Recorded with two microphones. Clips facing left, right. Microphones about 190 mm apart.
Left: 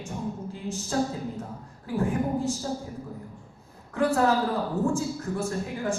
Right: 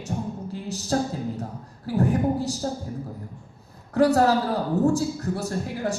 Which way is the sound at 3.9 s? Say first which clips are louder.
Right 4 dB; 40° right (ahead or behind).